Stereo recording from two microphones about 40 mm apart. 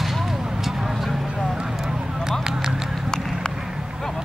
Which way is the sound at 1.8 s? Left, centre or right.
Centre.